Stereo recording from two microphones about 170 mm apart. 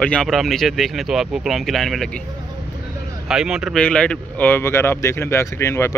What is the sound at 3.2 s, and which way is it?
Speech, 5° right (ahead or behind).